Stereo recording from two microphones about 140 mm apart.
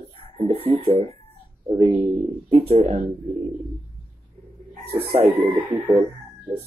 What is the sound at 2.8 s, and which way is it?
Speech, 50° right (ahead or behind).